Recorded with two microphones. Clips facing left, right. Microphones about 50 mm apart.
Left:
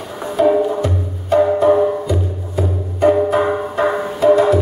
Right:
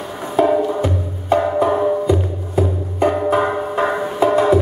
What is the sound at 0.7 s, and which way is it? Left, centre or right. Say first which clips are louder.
Music: even; centre.